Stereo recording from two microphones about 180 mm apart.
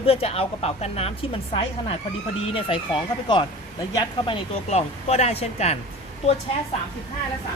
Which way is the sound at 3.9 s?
30° left (ahead or behind).